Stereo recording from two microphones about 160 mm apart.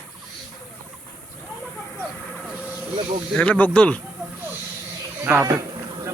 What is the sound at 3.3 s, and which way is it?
Speech, 10° left (ahead or behind).